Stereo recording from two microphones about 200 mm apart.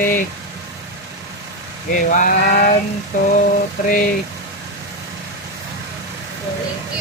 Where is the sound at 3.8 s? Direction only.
45° left (ahead or behind).